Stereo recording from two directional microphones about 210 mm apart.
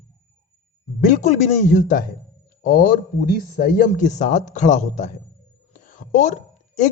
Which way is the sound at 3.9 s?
35° left (ahead or behind).